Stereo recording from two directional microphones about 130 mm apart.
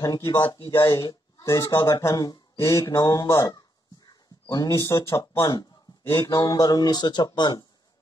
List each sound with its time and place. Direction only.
0.0 s speech: 30° left (ahead or behind)
0.7 s speech: 20° left (ahead or behind)
5.5 s a man's voice: 35° left (ahead or behind)